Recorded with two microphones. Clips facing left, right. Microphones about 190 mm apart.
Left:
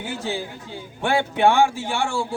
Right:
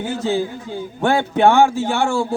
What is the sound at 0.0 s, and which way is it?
A man's voice, 40° right (ahead or behind).